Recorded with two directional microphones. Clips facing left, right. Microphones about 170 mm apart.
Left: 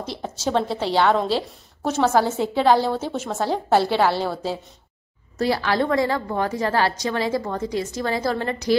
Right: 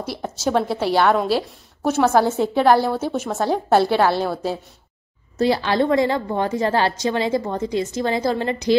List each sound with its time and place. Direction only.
0.0 s a woman's voice: 10° right (ahead or behind)